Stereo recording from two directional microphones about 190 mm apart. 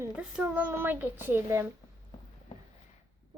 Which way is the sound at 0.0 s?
5° right (ahead or behind).